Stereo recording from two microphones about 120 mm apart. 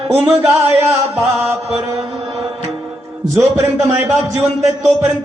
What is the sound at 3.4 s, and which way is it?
Speech, 20° right (ahead or behind).